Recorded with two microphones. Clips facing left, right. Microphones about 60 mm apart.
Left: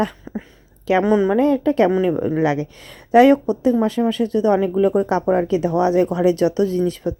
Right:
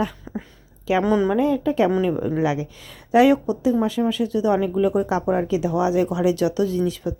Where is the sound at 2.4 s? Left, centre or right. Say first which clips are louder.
Left 3 dB; left.